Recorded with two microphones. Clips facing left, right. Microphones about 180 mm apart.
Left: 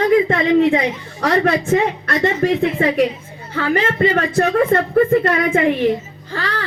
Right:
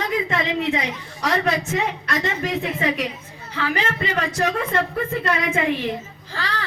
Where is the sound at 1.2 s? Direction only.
55° left (ahead or behind).